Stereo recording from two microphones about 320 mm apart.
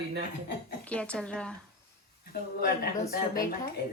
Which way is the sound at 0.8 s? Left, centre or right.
Centre.